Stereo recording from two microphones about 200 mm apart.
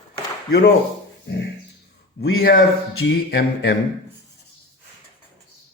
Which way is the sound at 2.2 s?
45° left (ahead or behind).